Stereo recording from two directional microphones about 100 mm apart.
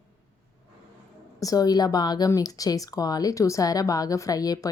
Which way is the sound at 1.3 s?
35° left (ahead or behind).